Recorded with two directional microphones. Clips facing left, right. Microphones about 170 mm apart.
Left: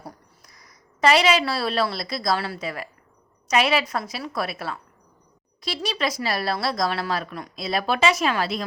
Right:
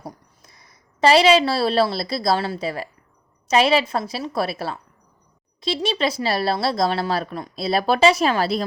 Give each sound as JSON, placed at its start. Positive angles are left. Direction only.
{"t": 0.0, "sound": "a woman's voice", "side_deg": -25}